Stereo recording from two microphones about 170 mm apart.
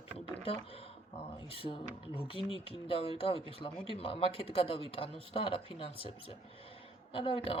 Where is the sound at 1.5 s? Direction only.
30° left (ahead or behind).